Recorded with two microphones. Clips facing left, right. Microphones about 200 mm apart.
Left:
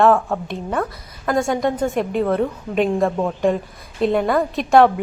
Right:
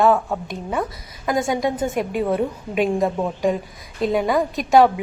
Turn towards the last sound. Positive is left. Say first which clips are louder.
# left 1 dB
turn(degrees=0)  # may be behind; listen again after turning